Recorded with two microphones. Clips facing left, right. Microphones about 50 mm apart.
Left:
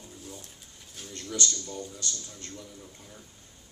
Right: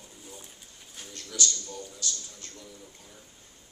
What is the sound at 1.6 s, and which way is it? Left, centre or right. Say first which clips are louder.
Speech: left 1 dB; left.